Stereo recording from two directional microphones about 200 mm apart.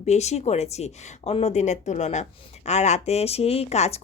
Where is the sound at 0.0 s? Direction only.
35° left (ahead or behind).